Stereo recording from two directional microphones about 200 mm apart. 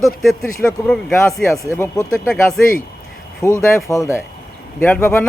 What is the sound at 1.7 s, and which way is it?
Speech, 15° left (ahead or behind).